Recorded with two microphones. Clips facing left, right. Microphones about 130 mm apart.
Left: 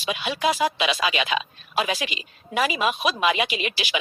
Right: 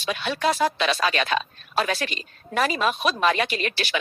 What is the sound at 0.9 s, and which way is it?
Speech, 40° right (ahead or behind).